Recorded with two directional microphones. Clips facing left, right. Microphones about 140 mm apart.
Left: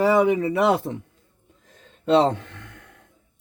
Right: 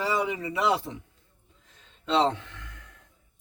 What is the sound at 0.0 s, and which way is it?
Speech, 60° left (ahead or behind).